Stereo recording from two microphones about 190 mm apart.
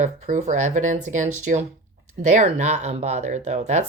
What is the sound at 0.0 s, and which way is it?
Speech, 40° right (ahead or behind).